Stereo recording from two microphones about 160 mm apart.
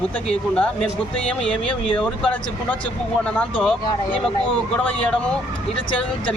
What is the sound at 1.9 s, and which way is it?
Speech, 10° left (ahead or behind).